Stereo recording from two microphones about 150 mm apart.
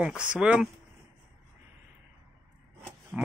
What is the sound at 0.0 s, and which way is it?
Speech, 5° right (ahead or behind).